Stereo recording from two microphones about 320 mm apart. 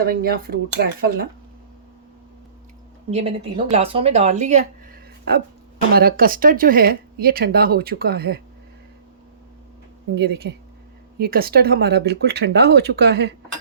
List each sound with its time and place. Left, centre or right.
0.0 s speech: right
3.1 s speech: centre
5.3 s speech: right
10.2 s speech: right